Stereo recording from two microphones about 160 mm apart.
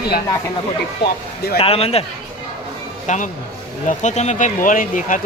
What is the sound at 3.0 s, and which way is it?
Speech, 50° left (ahead or behind).